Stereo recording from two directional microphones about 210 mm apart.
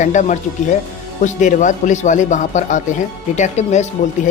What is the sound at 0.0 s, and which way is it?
Speech, 35° left (ahead or behind).